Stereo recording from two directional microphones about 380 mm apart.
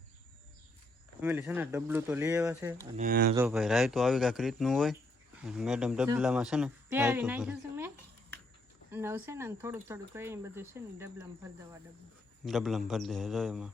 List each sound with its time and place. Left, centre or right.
1.2 s speech: centre
2.8 s speech: centre
3.3 s speech: centre
8.9 s speech: centre
12.5 s speech: centre